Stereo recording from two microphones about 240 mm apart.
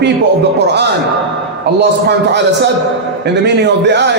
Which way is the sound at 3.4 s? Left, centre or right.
Right.